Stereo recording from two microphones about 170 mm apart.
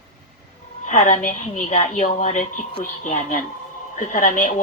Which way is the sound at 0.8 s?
45° left (ahead or behind).